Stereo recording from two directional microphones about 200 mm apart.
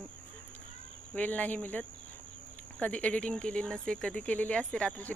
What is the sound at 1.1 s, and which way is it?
Speech, 5° left (ahead or behind).